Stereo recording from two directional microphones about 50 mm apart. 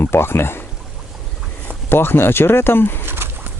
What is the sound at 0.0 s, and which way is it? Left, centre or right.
Speech, left.